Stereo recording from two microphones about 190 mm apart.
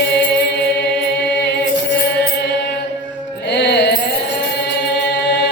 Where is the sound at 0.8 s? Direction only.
60° left (ahead or behind).